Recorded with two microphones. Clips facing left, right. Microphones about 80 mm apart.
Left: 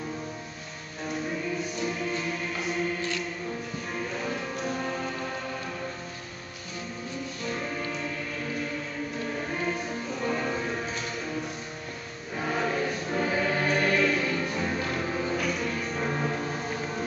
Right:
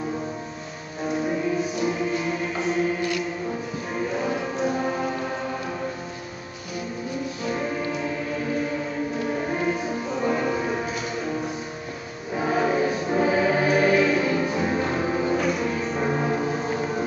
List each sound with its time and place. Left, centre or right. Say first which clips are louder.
1.6 s music: right 6 dB; centre
7.4 s music: right 5 dB; centre
9.5 s music: right 6 dB; centre
12.4 s choir: right 6 dB; centre
15.0 s music: right 6 dB; centre